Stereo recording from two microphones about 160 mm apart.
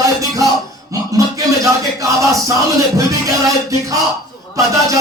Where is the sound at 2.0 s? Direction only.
20° right (ahead or behind).